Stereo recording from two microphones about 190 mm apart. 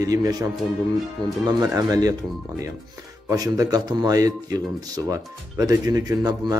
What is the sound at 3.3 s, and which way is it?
A man's voice, 20° right (ahead or behind).